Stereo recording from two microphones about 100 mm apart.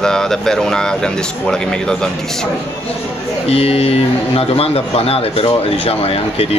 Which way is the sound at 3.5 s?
90° left.